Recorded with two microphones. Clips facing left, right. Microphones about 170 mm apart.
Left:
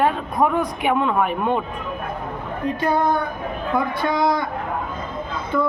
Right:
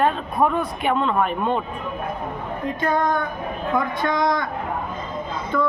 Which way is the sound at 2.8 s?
5° left (ahead or behind).